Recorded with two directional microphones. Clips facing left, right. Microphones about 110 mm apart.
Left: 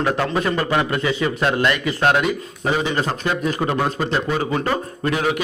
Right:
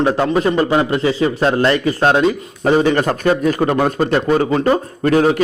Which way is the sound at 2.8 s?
50° right (ahead or behind).